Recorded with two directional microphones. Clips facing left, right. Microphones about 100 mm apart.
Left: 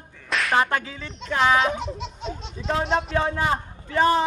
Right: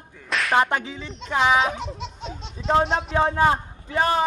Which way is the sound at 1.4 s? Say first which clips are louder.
Even; centre (ahead or behind).